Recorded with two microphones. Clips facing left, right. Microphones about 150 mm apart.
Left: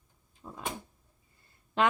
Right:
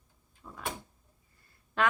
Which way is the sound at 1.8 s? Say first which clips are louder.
Left 2 dB; 20° left (ahead or behind).